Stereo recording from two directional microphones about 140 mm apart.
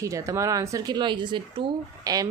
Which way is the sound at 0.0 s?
20° right (ahead or behind).